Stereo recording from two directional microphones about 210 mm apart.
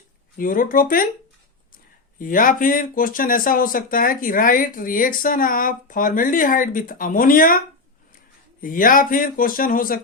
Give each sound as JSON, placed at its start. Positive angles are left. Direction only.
{"t": 0.3, "sound": "speech", "side_deg": 40}
{"t": 2.1, "sound": "speech", "side_deg": 40}
{"t": 8.6, "sound": "speech", "side_deg": 40}